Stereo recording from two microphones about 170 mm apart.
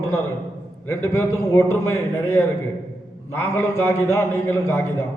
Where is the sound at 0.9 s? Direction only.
15° left (ahead or behind).